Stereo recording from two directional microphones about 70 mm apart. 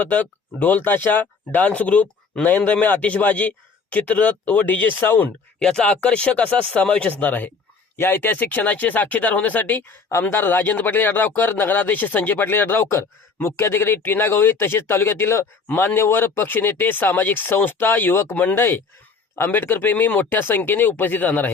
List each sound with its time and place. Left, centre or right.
0.0 s a man's voice: left
5.5 s a man's voice: centre
10.1 s speech: left
10.4 s a man's voice: left
18.3 s a man's voice: left